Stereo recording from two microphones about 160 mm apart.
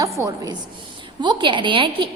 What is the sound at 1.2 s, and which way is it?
Speech, 30° right (ahead or behind).